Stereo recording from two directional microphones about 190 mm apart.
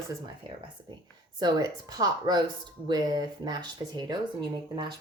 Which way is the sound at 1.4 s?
20° right (ahead or behind).